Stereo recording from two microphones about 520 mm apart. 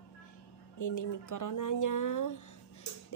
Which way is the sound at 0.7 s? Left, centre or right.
Left.